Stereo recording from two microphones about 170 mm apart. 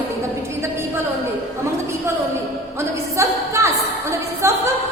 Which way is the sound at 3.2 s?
15° right (ahead or behind).